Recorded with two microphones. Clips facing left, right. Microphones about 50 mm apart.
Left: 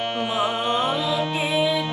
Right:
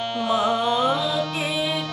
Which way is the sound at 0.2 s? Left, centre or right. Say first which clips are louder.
Right 4 dB; left.